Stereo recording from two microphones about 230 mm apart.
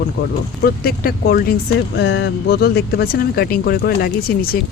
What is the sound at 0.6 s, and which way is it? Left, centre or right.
Speech, left.